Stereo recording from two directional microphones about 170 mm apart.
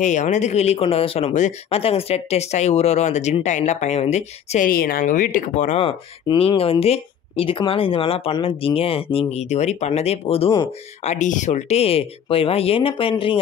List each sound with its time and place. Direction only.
0.0 s speech: 45° left (ahead or behind)
11.1 s speech: 45° left (ahead or behind); by 13.4 s 30° left (ahead or behind)